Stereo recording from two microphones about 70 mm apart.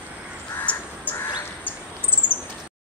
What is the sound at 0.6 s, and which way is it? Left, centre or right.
Crow, left.